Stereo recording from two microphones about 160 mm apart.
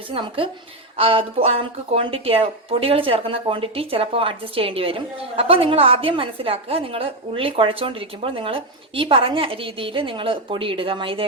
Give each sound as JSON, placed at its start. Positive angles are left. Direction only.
{"t": 0.1, "sound": "speech", "side_deg": -35}